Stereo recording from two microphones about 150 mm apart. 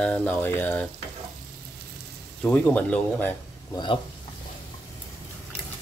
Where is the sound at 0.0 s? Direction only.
10° left (ahead or behind).